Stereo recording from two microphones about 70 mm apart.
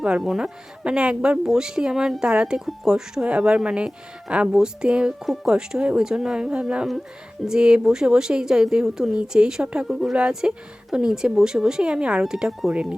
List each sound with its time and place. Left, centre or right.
0.2 s speech: centre